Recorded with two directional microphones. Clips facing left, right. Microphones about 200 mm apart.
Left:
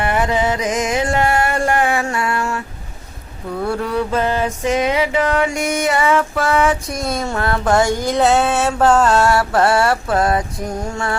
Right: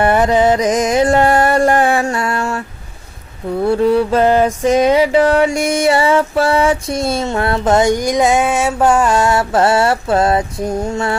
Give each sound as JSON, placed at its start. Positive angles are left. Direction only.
{"t": 0.0, "sound": "music", "side_deg": -40}
{"t": 3.6, "sound": "a sound", "side_deg": -25}
{"t": 4.1, "sound": "music", "side_deg": -35}